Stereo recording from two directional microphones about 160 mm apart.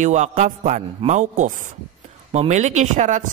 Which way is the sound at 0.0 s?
50° right (ahead or behind).